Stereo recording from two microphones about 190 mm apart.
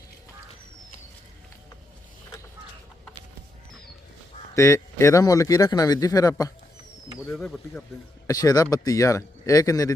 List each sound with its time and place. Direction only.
4.5 s speech: 15° left (ahead or behind)
7.3 s speech: 5° left (ahead or behind)
8.3 s speech: 20° left (ahead or behind)